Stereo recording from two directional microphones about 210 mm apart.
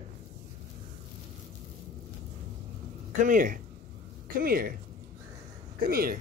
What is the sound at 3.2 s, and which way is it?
Speech, 40° right (ahead or behind).